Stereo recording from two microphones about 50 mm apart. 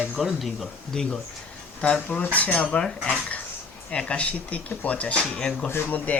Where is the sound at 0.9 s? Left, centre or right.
Centre.